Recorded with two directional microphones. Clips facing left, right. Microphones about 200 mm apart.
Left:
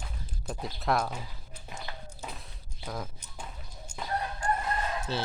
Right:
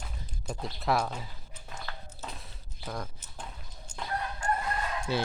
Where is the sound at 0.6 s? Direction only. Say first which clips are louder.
Even; centre (ahead or behind).